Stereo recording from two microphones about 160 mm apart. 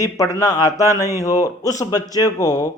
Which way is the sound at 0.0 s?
20° left (ahead or behind).